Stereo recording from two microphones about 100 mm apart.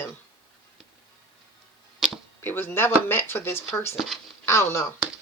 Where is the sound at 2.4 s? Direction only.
20° left (ahead or behind).